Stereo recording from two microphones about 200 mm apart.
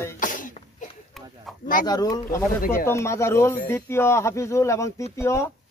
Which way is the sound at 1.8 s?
20° left (ahead or behind).